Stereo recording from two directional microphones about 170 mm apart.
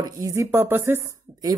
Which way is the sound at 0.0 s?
20° right (ahead or behind).